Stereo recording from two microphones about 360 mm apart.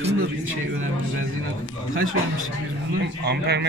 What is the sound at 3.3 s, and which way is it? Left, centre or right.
Speech, right.